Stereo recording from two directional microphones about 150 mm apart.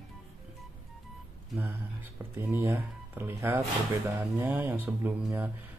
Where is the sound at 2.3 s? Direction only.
15° right (ahead or behind).